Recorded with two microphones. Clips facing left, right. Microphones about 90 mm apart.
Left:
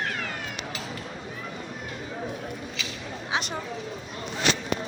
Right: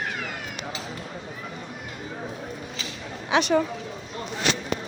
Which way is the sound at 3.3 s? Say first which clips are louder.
Right 7 dB; 70° right (ahead or behind).